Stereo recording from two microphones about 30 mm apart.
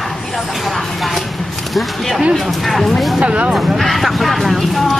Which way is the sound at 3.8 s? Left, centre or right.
Centre.